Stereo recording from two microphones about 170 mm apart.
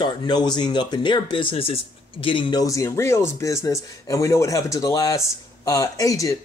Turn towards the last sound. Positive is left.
turn(degrees=20)  # may be behind; listen again after turning